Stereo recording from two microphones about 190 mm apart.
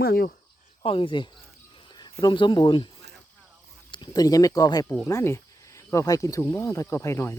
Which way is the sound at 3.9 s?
20° left (ahead or behind).